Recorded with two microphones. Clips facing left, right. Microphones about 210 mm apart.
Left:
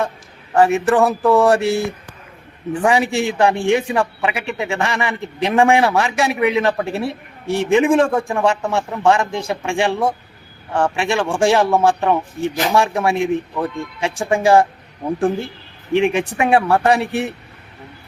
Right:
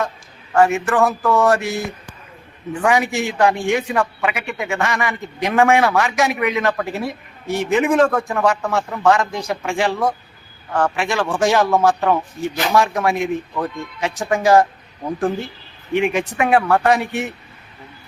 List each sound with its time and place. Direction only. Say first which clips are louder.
0.6 s mantra: left 2 dB; 35° left (ahead or behind)
2.8 s speech: left 1 dB; 30° left (ahead or behind)
15.9 s speech: left 2 dB; 30° left (ahead or behind)
16.5 s mantra: left 1 dB; 30° left (ahead or behind)